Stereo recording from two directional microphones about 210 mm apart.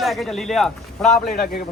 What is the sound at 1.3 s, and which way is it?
Speech, 45° left (ahead or behind).